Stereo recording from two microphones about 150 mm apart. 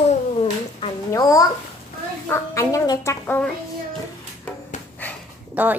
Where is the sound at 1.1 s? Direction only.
20° left (ahead or behind).